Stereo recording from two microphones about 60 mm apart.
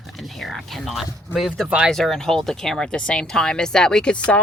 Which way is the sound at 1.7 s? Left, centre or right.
Centre.